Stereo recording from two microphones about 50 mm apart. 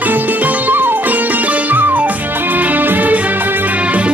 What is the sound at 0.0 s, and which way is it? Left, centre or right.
Music, right.